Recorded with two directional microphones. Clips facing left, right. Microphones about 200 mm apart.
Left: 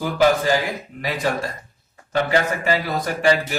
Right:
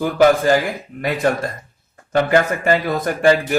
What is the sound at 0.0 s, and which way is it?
Speech, 55° right (ahead or behind).